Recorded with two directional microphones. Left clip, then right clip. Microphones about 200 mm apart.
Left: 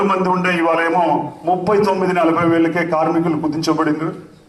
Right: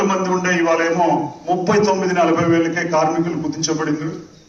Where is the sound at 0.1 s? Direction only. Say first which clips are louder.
Left 2 dB; 30° left (ahead or behind).